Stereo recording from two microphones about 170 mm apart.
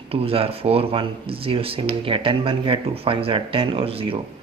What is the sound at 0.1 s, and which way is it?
Speech, 35° right (ahead or behind).